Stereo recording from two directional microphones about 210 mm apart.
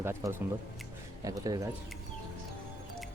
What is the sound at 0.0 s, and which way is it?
A man's voice, 10° right (ahead or behind).